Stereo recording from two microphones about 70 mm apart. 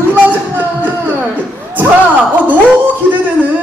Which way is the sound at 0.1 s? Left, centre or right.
Right.